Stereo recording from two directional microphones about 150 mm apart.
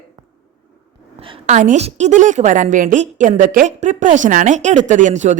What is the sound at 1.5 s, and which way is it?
A woman's voice, 50° right (ahead or behind).